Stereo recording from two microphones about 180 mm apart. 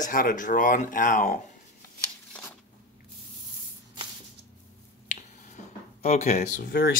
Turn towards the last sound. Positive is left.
turn(degrees=45)  # may be behind; listen again after turning